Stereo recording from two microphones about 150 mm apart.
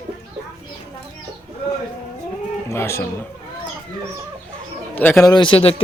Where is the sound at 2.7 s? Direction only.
20° left (ahead or behind).